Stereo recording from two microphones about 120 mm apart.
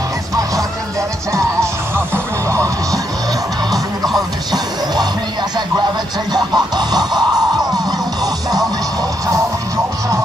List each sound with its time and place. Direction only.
1.3 s music: 20° right (ahead or behind)
3.7 s music: centre (ahead or behind)
6.3 s music: 35° right (ahead or behind)